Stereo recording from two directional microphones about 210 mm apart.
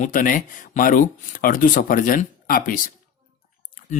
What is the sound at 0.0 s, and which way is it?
Speech, 40° left (ahead or behind).